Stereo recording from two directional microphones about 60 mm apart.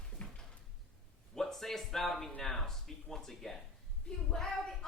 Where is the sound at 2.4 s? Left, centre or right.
Centre.